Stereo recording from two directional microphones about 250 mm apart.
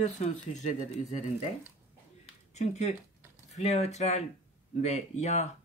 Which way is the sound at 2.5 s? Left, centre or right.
Left.